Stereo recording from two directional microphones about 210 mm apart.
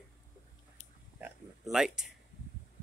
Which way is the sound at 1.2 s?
Centre (ahead or behind).